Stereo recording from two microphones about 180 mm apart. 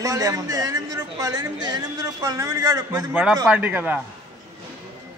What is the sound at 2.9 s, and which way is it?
A man's voice, 5° right (ahead or behind).